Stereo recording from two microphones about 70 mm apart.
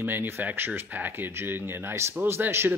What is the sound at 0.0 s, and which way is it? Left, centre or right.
Speech, right.